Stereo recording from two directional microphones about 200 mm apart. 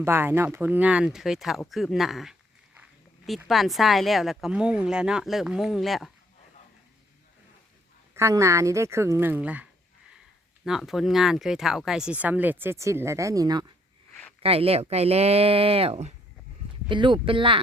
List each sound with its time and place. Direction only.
0.0 s speech: 10° right (ahead or behind)
8.1 s speech: 15° right (ahead or behind)
10.7 s speech: centre (ahead or behind); by 13.7 s 20° right (ahead or behind)
14.4 s speech: 30° right (ahead or behind)